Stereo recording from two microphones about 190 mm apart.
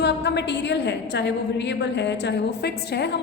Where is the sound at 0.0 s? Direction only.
65° left (ahead or behind).